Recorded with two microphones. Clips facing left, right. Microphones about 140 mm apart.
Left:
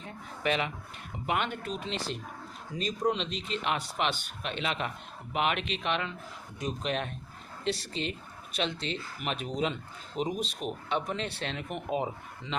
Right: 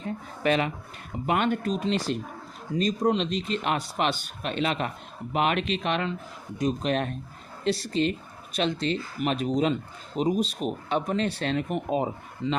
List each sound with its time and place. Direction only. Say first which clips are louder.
0.4 s speech: right 6 dB; 45° right (ahead or behind)